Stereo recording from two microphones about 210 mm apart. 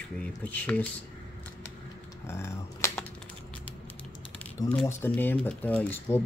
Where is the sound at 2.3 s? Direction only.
10° left (ahead or behind).